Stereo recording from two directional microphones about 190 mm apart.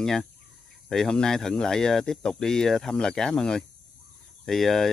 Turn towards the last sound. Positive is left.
turn(degrees=0)  # may be behind; listen again after turning